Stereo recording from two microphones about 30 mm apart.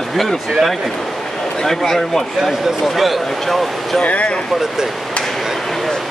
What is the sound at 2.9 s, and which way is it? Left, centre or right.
Speech, centre.